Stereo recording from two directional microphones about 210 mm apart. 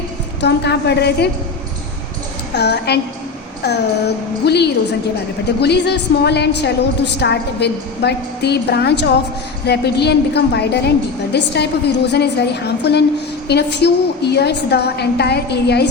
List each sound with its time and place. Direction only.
0.4 s a woman's voice: 55° left (ahead or behind)
2.6 s a woman's voice: 50° left (ahead or behind)